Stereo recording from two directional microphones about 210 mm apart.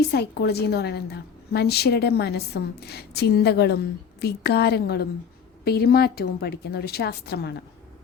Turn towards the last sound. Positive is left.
turn(degrees=50)  # may be behind; listen again after turning